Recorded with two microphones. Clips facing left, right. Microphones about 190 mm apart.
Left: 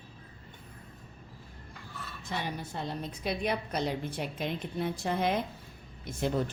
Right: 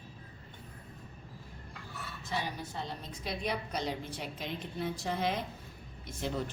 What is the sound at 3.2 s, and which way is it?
A woman's voice, 60° left (ahead or behind).